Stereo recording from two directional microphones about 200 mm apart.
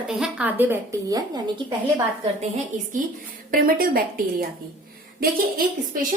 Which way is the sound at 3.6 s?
45° right (ahead or behind).